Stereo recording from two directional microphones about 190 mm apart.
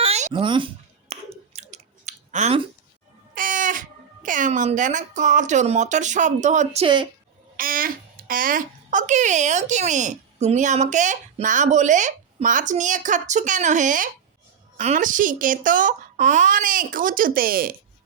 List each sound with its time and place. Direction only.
0.0 s clicking: 35° right (ahead or behind)
3.3 s speech: 45° right (ahead or behind)
6.8 s speech: 25° right (ahead or behind)
7.5 s a child's voice: 50° right (ahead or behind)